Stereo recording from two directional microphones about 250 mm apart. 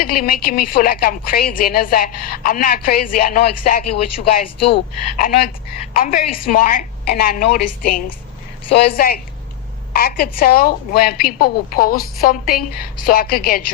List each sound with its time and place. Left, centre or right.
0.0 s a woman's voice: left
4.6 s speech: left
5.2 s a woman's voice: left